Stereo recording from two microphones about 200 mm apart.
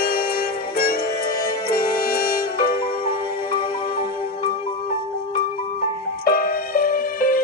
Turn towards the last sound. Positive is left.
turn(degrees=45)  # may be behind; listen again after turning